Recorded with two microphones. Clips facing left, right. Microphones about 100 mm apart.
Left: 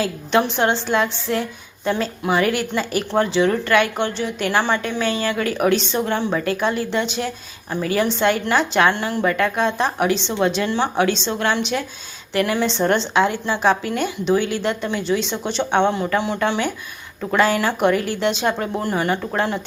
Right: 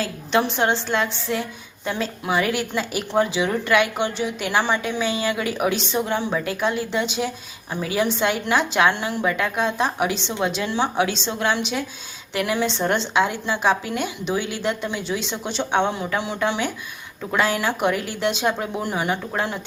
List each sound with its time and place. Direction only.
0.0 s a woman's voice: centre (ahead or behind)